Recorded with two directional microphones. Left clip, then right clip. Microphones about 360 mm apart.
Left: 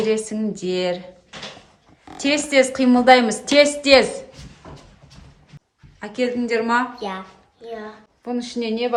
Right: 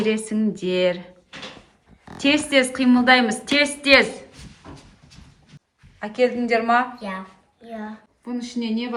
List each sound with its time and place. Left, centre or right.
0.0 s a woman's voice: centre
2.1 s a woman's voice: centre
6.0 s a woman's voice: centre
8.3 s a woman's voice: left